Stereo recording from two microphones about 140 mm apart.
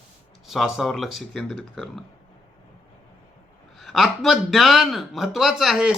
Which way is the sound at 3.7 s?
Centre (ahead or behind).